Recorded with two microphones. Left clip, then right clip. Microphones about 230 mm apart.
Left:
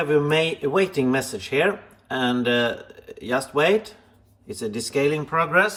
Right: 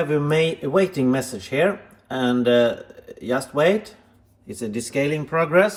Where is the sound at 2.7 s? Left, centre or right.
Centre.